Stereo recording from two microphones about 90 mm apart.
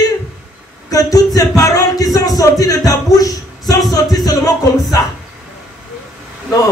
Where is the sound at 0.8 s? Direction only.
40° left (ahead or behind).